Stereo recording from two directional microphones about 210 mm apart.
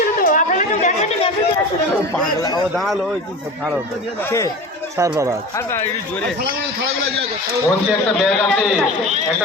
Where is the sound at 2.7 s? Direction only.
Centre (ahead or behind).